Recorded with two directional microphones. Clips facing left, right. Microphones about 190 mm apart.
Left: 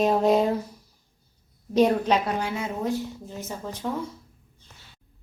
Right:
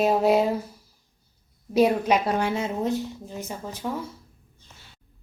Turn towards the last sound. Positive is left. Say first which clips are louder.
# even
turn(degrees=0)  # may be behind; listen again after turning